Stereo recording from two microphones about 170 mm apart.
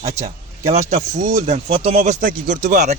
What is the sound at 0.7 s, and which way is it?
Speech, 45° right (ahead or behind).